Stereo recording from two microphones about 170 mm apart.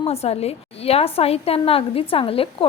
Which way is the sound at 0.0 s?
35° left (ahead or behind).